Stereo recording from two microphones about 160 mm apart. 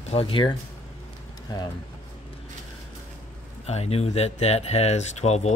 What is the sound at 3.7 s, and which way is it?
Speech, 40° left (ahead or behind).